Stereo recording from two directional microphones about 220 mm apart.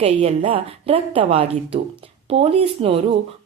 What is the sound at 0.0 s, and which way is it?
A woman's voice, 30° right (ahead or behind).